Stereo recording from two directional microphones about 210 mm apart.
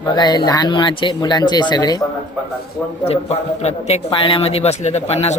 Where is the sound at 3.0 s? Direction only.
30° left (ahead or behind).